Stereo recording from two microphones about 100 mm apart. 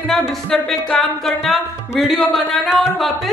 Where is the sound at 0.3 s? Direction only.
5° left (ahead or behind).